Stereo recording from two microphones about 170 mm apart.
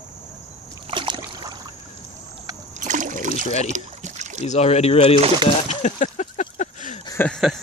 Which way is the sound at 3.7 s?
45° right (ahead or behind).